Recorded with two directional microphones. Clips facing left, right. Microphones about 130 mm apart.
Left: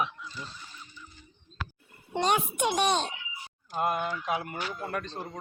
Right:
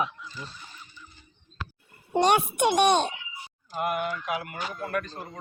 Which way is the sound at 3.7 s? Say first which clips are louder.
Even; 25° left (ahead or behind).